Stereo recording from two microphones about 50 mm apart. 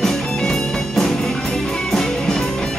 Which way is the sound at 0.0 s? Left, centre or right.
Centre.